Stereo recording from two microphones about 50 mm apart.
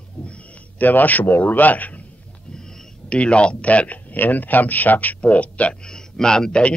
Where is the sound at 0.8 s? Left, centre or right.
Left.